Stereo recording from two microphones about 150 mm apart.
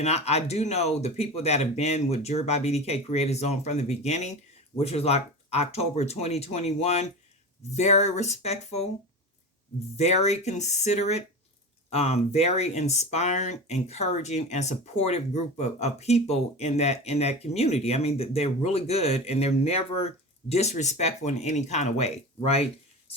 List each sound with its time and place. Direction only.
0.0 s speech: 45° left (ahead or behind)
10.0 s speech: 45° left (ahead or behind)